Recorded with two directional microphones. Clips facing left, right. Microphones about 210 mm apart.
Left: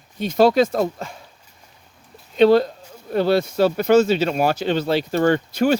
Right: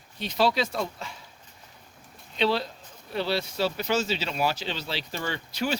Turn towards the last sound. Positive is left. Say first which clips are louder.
# left 11 dB
turn(degrees=50)  # may be behind; listen again after turning